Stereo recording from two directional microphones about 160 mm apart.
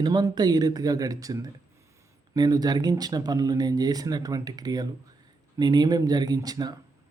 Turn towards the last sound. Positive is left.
turn(degrees=-25)  # may be behind; listen again after turning